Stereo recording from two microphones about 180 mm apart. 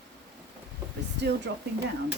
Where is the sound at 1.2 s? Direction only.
70° right (ahead or behind).